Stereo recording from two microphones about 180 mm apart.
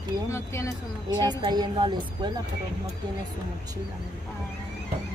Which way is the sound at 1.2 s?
25° right (ahead or behind).